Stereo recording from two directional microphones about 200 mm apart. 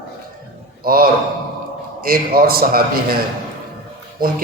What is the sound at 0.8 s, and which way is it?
A man's voice, 45° right (ahead or behind).